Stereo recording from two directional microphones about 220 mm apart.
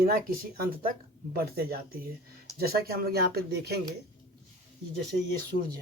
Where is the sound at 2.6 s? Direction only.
45° right (ahead or behind).